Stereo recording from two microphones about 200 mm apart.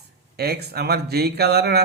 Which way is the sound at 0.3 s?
55° right (ahead or behind).